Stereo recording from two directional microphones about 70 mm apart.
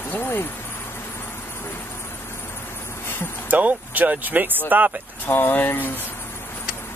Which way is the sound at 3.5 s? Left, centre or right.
Right.